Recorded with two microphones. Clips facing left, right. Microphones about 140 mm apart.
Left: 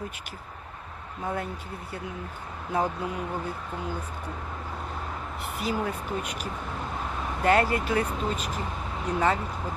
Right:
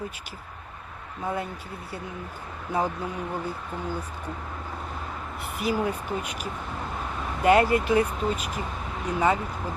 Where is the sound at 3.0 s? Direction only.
Centre (ahead or behind).